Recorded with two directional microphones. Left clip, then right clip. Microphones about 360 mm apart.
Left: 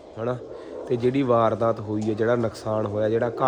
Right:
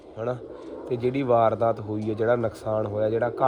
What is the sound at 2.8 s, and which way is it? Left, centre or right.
Speech, left.